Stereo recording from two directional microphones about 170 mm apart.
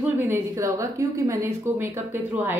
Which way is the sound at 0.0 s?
15° right (ahead or behind).